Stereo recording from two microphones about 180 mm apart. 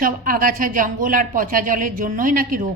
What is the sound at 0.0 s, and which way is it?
A woman's voice, 50° right (ahead or behind).